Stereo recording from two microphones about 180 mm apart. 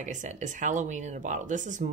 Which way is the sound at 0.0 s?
45° right (ahead or behind).